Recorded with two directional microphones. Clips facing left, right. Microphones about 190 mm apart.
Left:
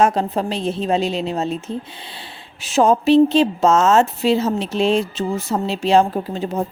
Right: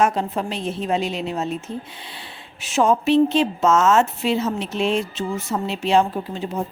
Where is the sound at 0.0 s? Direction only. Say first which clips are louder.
Left 3 dB; 35° left (ahead or behind).